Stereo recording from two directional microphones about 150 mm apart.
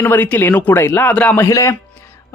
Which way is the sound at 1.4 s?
20° left (ahead or behind).